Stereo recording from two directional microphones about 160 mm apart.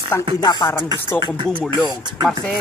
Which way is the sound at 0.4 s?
25° left (ahead or behind).